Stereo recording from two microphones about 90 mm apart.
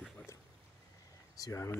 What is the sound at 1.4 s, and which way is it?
Speech, 35° left (ahead or behind).